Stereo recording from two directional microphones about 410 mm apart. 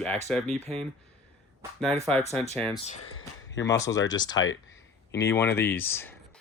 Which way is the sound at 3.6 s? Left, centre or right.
Centre.